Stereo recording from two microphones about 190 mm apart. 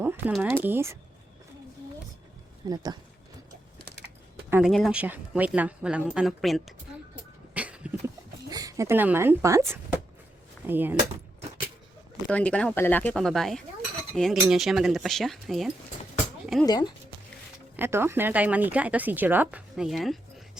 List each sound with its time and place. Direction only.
0.0 s a sound: 10° right (ahead or behind)
0.3 s speech: 5° left (ahead or behind)
0.6 s speech: 10° right (ahead or behind)
2.6 s speech: 20° right (ahead or behind)
4.4 s a sound: 10° right (ahead or behind)
4.7 s speech: 5° right (ahead or behind)
7.5 s a sound: 5° right (ahead or behind)
8.4 s speech: 20° right (ahead or behind)
12.3 s speech: 5° left (ahead or behind)
16.6 s speech: 20° left (ahead or behind)
17.7 s speech: 10° right (ahead or behind)